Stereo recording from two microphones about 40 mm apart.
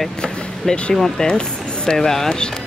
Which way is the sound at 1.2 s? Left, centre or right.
Left.